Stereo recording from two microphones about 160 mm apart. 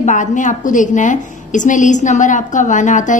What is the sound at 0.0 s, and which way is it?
A woman's voice, 50° left (ahead or behind).